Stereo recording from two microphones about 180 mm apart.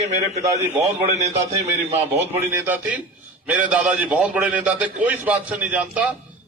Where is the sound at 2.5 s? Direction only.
10° right (ahead or behind).